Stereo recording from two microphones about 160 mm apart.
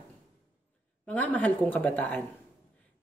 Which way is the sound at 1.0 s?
10° left (ahead or behind).